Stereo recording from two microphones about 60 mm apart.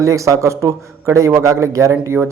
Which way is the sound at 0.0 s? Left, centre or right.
Right.